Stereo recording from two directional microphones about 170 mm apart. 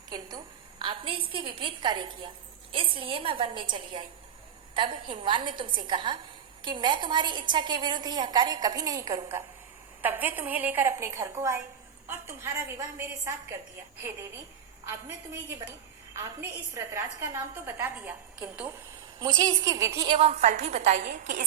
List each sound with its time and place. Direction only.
0.1 s a sound: 25° right (ahead or behind)
2.7 s a woman's voice: 30° right (ahead or behind); by 13.3 s 15° right (ahead or behind)
14.8 s a woman's voice: 15° right (ahead or behind)
19.2 s a woman's voice: 20° right (ahead or behind)
20.1 s a woman's voice: 40° right (ahead or behind)